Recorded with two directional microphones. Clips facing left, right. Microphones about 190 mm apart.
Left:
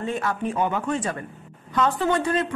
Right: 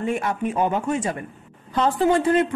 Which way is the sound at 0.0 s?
20° right (ahead or behind).